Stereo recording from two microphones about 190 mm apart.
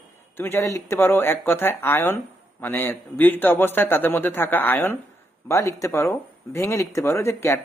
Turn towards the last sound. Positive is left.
turn(degrees=15)  # may be behind; listen again after turning